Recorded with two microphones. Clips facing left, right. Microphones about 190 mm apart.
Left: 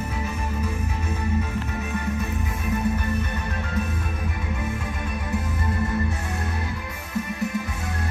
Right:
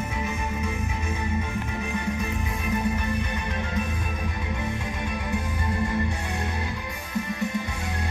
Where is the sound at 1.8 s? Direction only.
15° right (ahead or behind).